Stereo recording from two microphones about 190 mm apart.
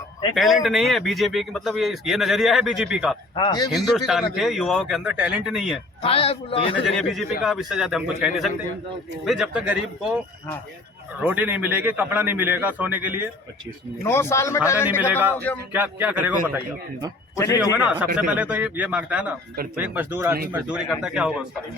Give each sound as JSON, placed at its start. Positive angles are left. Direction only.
{"t": 0.3, "sound": "speech", "side_deg": 0}
{"t": 3.3, "sound": "a man's voice", "side_deg": 20}
{"t": 3.9, "sound": "speech", "side_deg": 0}
{"t": 6.0, "sound": "a man's voice", "side_deg": 30}
{"t": 6.8, "sound": "speech", "side_deg": 0}
{"t": 11.2, "sound": "a man's voice", "side_deg": -10}
{"t": 14.0, "sound": "a man's voice", "side_deg": 15}
{"t": 14.8, "sound": "a man's voice", "side_deg": -10}
{"t": 17.3, "sound": "a man's voice", "side_deg": 15}
{"t": 17.6, "sound": "a man's voice", "side_deg": -5}